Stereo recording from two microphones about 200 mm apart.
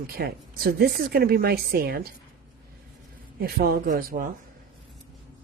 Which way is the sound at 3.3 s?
50° right (ahead or behind).